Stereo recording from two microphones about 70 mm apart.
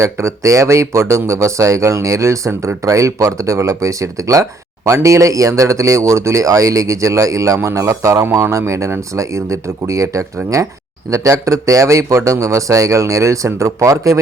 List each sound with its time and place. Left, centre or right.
0.0 s speech: right